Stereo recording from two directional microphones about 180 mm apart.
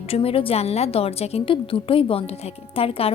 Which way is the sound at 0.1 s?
30° left (ahead or behind).